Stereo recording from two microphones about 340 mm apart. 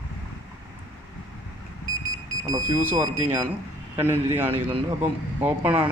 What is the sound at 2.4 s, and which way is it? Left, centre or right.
Speech, centre.